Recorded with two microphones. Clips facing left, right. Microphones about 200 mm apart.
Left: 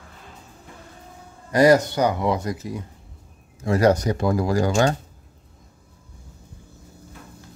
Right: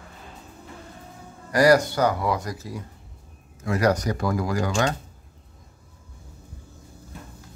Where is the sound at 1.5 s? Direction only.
20° left (ahead or behind).